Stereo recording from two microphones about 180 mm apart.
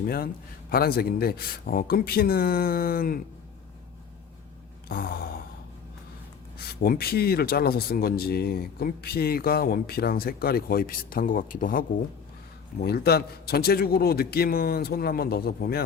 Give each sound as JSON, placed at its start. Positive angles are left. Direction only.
{"t": 0.7, "sound": "speech", "side_deg": 60}
{"t": 4.9, "sound": "speech", "side_deg": 55}
{"t": 6.6, "sound": "speech", "side_deg": 55}
{"t": 12.8, "sound": "speech", "side_deg": 60}